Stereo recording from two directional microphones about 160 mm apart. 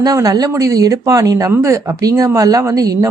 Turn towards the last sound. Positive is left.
turn(degrees=-20)  # may be behind; listen again after turning